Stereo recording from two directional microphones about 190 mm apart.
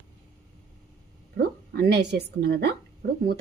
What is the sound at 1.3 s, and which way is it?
A woman's voice, 55° right (ahead or behind).